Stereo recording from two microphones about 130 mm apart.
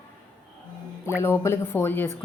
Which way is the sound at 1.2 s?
20° left (ahead or behind).